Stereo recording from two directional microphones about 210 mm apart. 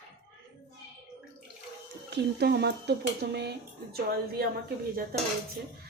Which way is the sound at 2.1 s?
50° right (ahead or behind).